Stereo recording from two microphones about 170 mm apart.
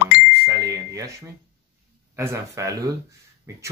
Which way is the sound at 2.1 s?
15° right (ahead or behind).